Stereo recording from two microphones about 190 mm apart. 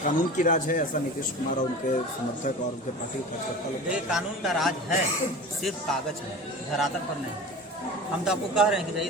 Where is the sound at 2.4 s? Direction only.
40° left (ahead or behind).